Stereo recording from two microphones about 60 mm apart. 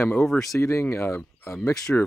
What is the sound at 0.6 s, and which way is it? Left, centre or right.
Speech, left.